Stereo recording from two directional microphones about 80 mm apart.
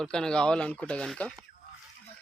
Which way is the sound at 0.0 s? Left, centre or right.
Centre.